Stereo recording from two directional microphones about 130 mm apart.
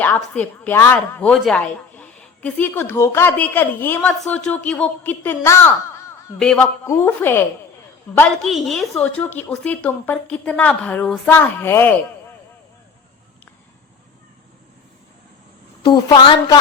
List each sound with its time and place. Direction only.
0.0 s a woman's voice: 15° left (ahead or behind)
1.3 s a woman's voice: 5° left (ahead or behind)
6.4 s a woman's voice: 5° left (ahead or behind)
6.8 s a woman's voice: 15° left (ahead or behind)
8.2 s a woman's voice: centre (ahead or behind)
9.1 s a woman's voice: 10° left (ahead or behind)
15.8 s a woman's voice: 35° left (ahead or behind)